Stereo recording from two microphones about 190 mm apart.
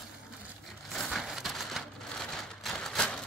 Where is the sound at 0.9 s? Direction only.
Centre (ahead or behind).